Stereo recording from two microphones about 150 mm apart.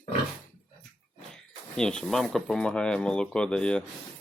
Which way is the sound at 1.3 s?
5° left (ahead or behind).